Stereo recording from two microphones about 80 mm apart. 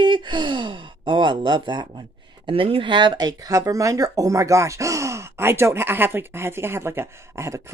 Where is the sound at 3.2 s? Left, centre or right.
Right.